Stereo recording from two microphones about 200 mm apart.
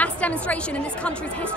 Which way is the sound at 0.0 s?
5° left (ahead or behind).